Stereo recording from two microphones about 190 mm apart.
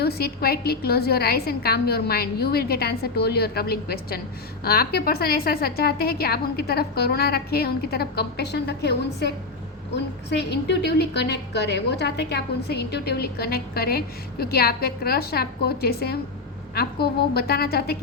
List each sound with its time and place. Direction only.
0.0 s a woman's voice: 55° left (ahead or behind)